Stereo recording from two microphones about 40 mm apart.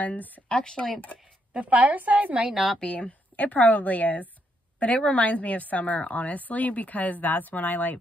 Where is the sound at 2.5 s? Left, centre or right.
Centre.